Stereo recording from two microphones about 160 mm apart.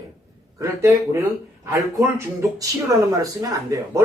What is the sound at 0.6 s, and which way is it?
Speech, 20° right (ahead or behind).